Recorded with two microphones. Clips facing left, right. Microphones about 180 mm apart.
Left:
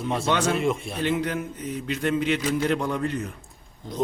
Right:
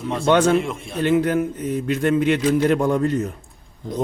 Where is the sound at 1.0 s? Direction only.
50° right (ahead or behind).